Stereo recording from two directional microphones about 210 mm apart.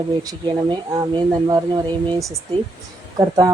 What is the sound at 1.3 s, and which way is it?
Speech, 20° right (ahead or behind).